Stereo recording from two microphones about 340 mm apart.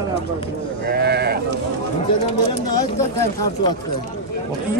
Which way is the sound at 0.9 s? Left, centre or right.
Right.